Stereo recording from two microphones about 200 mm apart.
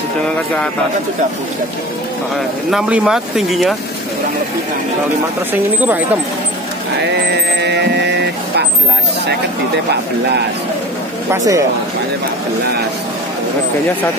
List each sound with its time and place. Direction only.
2.7 s speech: 5° right (ahead or behind)
7.1 s vehicle: 60° right (ahead or behind)
11.3 s speech: 15° right (ahead or behind)